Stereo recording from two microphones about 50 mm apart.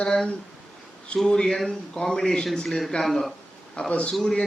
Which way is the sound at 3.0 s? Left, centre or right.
Left.